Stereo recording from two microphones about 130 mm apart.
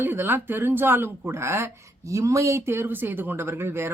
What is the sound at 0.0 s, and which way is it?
Speech, 15° right (ahead or behind).